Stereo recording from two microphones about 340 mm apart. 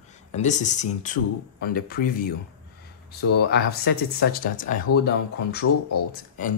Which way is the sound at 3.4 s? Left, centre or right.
Left.